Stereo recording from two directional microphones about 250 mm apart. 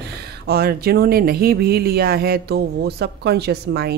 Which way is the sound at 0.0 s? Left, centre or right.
Right.